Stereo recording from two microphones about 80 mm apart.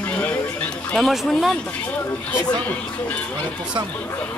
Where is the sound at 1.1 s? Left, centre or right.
Centre.